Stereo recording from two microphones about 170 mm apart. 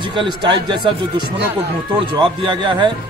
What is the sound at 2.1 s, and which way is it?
Speech, 25° right (ahead or behind).